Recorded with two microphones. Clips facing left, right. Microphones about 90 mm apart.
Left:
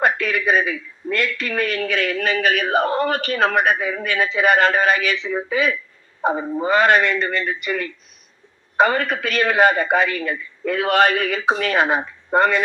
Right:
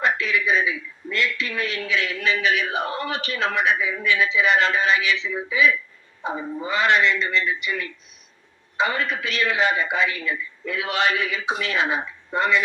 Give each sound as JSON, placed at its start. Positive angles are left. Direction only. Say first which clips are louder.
{"t": 0.0, "sound": "a man's voice", "louder": "left 3 dB", "side_deg": 50}